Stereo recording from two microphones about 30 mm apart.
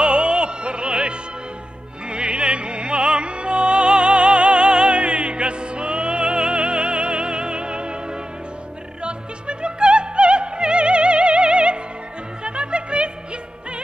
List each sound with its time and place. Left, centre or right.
0.0 s music: right
9.0 s opera: right
12.4 s music: right